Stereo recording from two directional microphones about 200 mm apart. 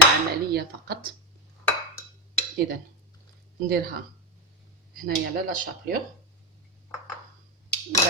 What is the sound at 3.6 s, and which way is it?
Speech, 50° right (ahead or behind).